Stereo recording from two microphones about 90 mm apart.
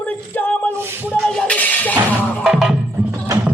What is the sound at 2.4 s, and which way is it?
Music, 5° right (ahead or behind).